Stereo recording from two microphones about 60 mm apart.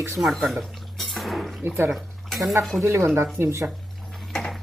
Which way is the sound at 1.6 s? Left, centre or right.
Right.